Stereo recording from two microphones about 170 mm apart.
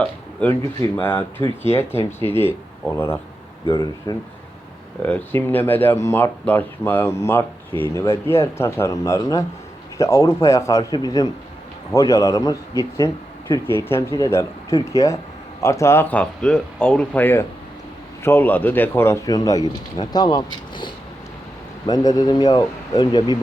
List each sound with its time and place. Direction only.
0.4 s speech: 10° left (ahead or behind)
5.0 s speech: 10° left (ahead or behind); by 20.4 s 25° left (ahead or behind)
21.8 s speech: 20° left (ahead or behind)